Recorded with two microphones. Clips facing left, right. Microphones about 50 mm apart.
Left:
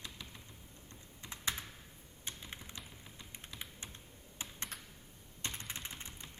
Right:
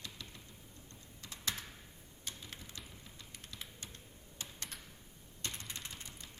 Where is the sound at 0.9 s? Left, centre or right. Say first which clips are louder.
Left 3 dB; left.